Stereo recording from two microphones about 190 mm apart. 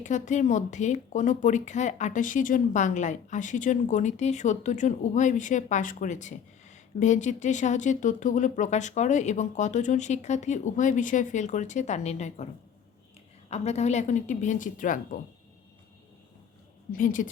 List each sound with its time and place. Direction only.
0.0 s speech: 40° left (ahead or behind)
13.5 s speech: 35° left (ahead or behind)
16.9 s a woman's voice: 45° left (ahead or behind)